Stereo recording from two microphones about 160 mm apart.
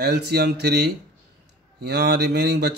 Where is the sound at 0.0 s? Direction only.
90° right.